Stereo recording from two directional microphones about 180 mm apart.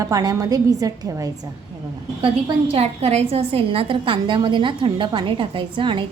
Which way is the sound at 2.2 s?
30° right (ahead or behind).